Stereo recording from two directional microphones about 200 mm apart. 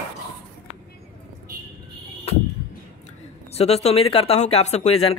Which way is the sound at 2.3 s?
30° left (ahead or behind).